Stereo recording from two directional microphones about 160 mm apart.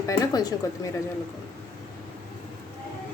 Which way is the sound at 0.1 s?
25° left (ahead or behind).